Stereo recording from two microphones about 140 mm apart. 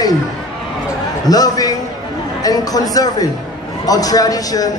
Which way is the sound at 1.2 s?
25° left (ahead or behind).